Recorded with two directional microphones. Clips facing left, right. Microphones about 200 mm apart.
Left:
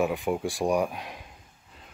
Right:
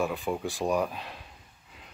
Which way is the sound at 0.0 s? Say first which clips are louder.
Left 3 dB; 15° left (ahead or behind).